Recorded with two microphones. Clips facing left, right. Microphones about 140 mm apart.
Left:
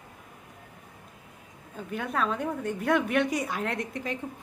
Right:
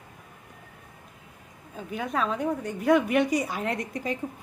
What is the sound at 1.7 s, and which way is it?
A woman's voice, centre (ahead or behind).